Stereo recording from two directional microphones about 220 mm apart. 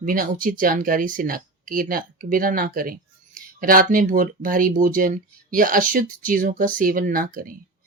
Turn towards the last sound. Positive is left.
turn(degrees=-40)  # may be behind; listen again after turning